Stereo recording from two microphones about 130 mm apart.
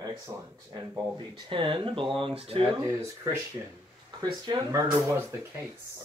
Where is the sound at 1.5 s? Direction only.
40° right (ahead or behind).